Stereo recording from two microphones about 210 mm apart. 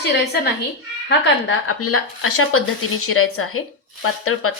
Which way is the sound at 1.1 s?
60° left (ahead or behind).